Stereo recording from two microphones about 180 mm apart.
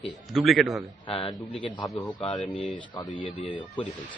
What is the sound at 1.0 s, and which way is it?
Speech, 30° left (ahead or behind).